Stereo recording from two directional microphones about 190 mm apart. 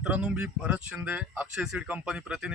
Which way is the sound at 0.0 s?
5° right (ahead or behind).